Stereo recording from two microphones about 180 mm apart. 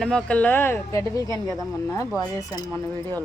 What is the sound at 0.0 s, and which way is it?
Speech, 5° left (ahead or behind).